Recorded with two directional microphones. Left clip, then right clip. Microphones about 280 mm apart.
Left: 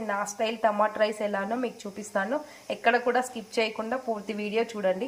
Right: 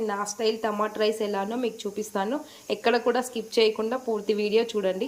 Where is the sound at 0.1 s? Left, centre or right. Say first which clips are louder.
Right 2 dB; centre.